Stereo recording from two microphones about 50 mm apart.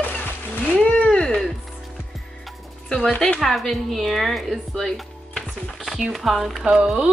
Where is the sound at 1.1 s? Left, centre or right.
Centre.